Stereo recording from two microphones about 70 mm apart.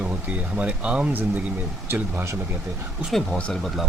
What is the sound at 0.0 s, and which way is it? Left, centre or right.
Speech, right.